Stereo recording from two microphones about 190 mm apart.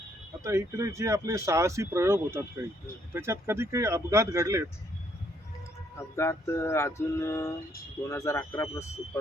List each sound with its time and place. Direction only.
0.4 s speech: 15° right (ahead or behind)
6.1 s music: 15° left (ahead or behind)